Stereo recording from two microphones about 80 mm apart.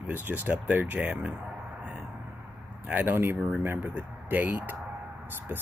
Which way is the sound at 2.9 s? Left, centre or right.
Right.